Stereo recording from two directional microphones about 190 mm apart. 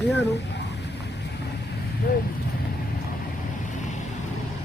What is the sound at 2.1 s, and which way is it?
Speech, 50° left (ahead or behind).